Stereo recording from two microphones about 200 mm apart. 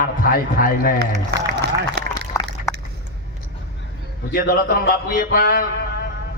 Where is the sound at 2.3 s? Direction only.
15° left (ahead or behind).